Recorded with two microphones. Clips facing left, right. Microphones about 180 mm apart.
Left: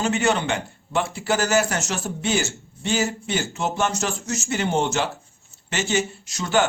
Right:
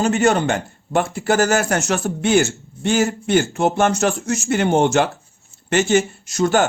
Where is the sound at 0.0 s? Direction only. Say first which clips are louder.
Right 5 dB; 45° right (ahead or behind).